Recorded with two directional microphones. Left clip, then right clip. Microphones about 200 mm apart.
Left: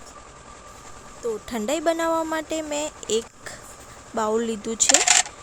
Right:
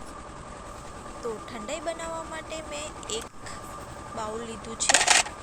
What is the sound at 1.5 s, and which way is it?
Speech, 45° left (ahead or behind).